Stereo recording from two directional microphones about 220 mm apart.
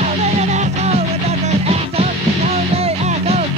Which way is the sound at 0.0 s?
30° right (ahead or behind).